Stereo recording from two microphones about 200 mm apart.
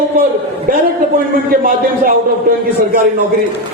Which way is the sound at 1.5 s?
45° right (ahead or behind).